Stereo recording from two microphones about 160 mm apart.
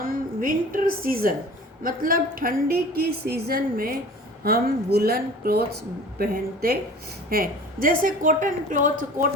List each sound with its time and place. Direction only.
0.1 s a woman's voice: 60° right (ahead or behind)